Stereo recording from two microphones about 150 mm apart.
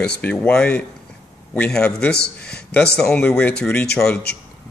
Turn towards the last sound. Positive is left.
turn(degrees=5)  # may be behind; listen again after turning